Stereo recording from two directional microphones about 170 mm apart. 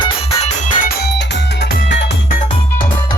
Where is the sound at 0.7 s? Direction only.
60° left (ahead or behind).